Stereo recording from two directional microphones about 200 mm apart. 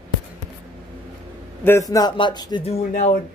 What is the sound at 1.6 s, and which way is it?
Speech, 15° left (ahead or behind).